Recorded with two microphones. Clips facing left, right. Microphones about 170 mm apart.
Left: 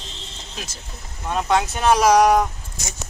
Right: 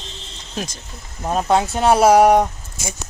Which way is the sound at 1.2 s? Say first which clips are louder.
Right 3 dB; 40° right (ahead or behind).